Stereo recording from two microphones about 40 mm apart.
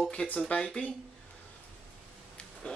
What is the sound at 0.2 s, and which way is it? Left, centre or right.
Speech, left.